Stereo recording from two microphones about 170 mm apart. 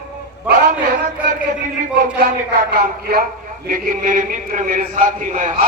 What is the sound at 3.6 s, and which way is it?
A man's voice, 55° right (ahead or behind).